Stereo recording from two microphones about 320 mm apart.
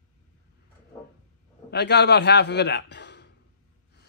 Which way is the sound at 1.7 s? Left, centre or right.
Left.